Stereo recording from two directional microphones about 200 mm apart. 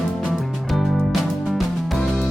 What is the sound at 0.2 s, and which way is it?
Music, centre (ahead or behind).